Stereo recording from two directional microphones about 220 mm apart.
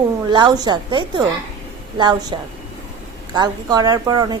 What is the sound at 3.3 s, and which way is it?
A woman's voice, 15° right (ahead or behind).